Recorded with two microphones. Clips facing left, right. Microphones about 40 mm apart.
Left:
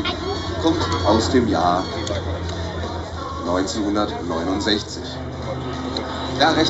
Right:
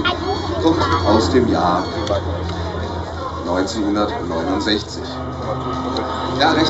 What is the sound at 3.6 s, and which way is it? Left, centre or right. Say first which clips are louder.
Speech: right 4 dB; right.